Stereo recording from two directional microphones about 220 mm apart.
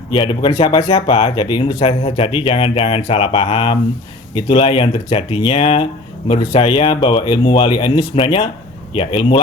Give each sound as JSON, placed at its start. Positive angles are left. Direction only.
{"t": 0.1, "sound": "speech", "side_deg": 20}